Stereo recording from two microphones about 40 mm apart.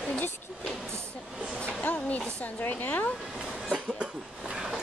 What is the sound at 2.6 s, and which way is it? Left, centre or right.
Speech, left.